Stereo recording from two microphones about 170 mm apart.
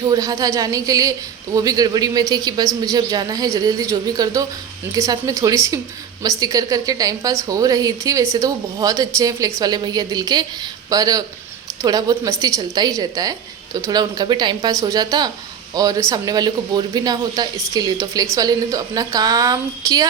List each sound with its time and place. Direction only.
0.0 s a woman's voice: 20° right (ahead or behind)